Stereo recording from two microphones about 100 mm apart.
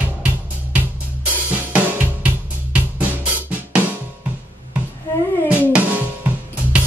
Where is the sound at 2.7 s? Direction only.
15° right (ahead or behind).